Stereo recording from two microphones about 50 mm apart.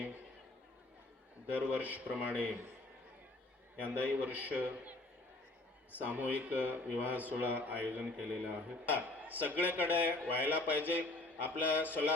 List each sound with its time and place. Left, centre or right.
1.5 s speech: right
3.8 s speech: right
6.0 s speech: right